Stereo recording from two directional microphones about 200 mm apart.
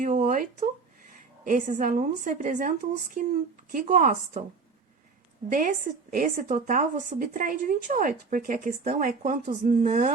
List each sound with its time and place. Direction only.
0.0 s a woman's voice: 40° right (ahead or behind)
5.5 s a woman's voice: 40° right (ahead or behind)